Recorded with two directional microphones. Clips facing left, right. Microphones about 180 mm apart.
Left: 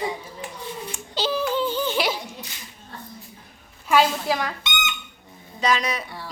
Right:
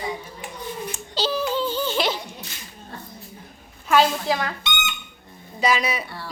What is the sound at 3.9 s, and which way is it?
Speech, 10° left (ahead or behind).